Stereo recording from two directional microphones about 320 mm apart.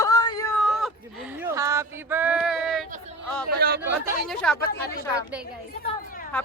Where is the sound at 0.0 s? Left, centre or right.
Centre.